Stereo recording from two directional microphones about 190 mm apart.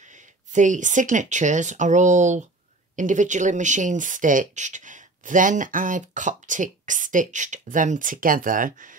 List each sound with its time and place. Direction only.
0.0 s speech: 40° right (ahead or behind)